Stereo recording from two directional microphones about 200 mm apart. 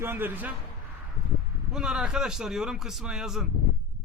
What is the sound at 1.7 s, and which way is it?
A man's voice, 5° right (ahead or behind).